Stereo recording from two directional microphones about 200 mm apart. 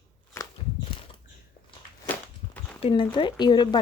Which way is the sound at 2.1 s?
10° left (ahead or behind).